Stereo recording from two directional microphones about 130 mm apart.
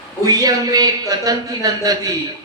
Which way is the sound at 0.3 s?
30° right (ahead or behind).